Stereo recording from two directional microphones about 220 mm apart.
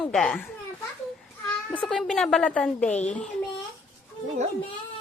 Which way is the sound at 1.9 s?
Centre (ahead or behind).